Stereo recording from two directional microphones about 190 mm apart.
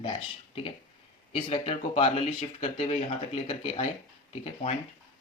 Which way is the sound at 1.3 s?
30° left (ahead or behind).